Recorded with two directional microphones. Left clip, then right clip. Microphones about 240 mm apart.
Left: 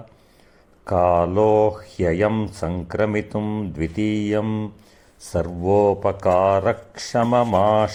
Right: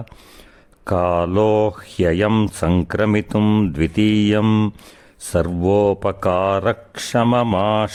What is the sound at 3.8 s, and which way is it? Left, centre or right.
Speech, right.